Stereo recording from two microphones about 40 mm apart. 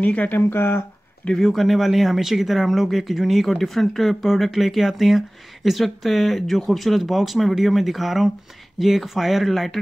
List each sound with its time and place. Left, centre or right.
0.0 s speech: left
0.4 s speech: left
1.3 s speech: centre